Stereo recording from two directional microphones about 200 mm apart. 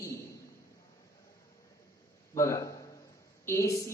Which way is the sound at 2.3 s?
15° left (ahead or behind).